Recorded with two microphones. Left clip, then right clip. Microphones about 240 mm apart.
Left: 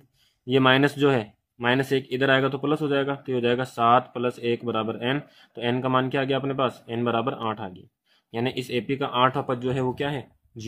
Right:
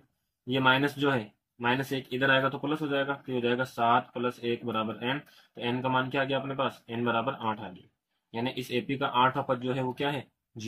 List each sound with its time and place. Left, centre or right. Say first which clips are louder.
0.5 s speech: left 5 dB; left
8.3 s speech: left 5 dB; left